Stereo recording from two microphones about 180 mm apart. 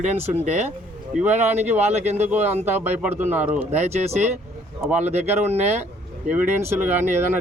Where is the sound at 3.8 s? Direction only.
40° right (ahead or behind).